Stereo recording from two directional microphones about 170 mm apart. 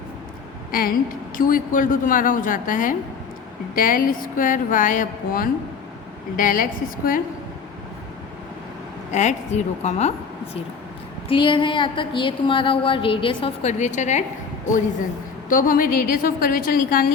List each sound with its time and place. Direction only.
0.7 s a woman's voice: 60° left (ahead or behind)
9.1 s a woman's voice: 40° left (ahead or behind)
11.3 s a woman's voice: 30° left (ahead or behind)
15.4 s a woman's voice: 55° left (ahead or behind)